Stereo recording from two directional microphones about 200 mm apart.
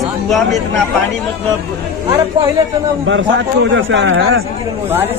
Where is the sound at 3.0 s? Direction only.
70° right (ahead or behind).